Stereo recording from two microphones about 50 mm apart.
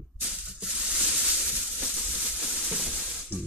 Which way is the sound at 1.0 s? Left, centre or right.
Centre.